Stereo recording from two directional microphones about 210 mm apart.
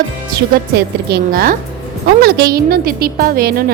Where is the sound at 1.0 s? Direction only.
50° right (ahead or behind).